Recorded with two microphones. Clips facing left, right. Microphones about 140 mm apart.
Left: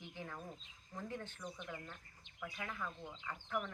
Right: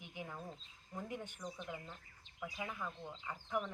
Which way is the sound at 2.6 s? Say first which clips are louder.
Right 1 dB; 15° right (ahead or behind).